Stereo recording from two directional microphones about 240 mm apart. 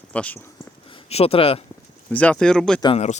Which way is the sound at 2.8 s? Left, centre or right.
Left.